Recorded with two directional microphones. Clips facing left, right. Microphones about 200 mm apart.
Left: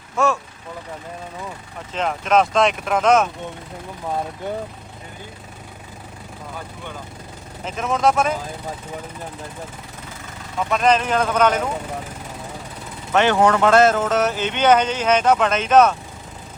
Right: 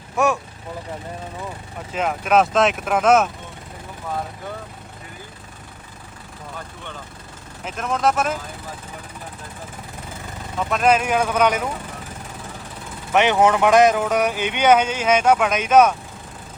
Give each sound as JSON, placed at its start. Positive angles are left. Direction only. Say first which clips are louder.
{"t": 0.2, "sound": "speech", "louder": "even", "side_deg": -15}
{"t": 1.9, "sound": "speech", "louder": "even", "side_deg": -5}
{"t": 7.6, "sound": "speech", "louder": "left 2 dB", "side_deg": -5}
{"t": 10.7, "sound": "speech", "louder": "even", "side_deg": -5}
{"t": 13.1, "sound": "speech", "louder": "even", "side_deg": -15}